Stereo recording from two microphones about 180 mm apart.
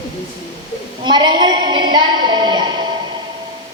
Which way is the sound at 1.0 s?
25° right (ahead or behind).